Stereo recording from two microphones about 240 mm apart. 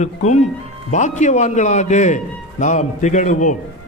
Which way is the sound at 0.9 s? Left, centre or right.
Left.